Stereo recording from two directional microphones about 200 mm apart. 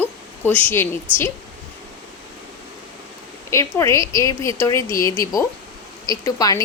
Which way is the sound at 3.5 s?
15° left (ahead or behind).